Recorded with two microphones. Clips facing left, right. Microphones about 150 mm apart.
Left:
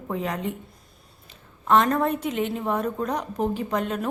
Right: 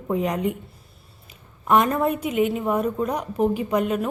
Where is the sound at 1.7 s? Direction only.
10° right (ahead or behind).